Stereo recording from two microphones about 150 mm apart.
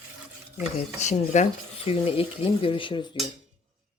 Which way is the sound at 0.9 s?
50° left (ahead or behind).